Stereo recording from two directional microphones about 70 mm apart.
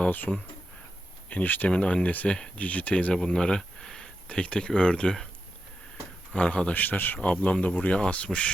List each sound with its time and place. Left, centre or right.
0.0 s speech: left
6.3 s speech: centre